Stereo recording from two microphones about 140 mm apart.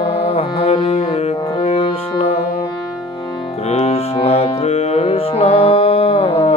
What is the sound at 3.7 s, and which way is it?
Music, 45° left (ahead or behind).